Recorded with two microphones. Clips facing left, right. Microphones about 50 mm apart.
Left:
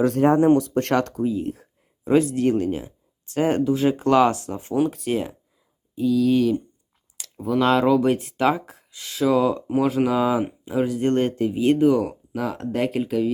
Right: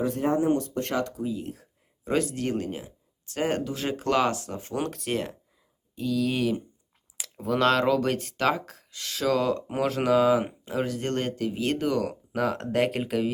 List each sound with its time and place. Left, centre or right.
0.0 s speech: left
1.2 s speech: left
4.7 s speech: centre
7.2 s a sound: centre
7.6 s speech: centre
9.0 s speech: centre
9.6 s speech: centre
10.8 s speech: centre
11.2 s speech: left
11.5 s speech: centre
12.3 s speech: centre